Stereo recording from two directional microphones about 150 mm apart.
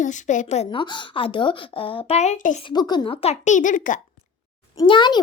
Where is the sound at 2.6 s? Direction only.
30° left (ahead or behind); by 4.0 s 60° left (ahead or behind).